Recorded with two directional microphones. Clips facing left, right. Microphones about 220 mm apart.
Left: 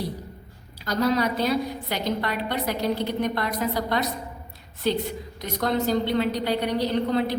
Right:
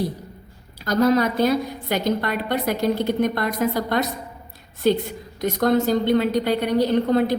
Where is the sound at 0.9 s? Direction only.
50° right (ahead or behind).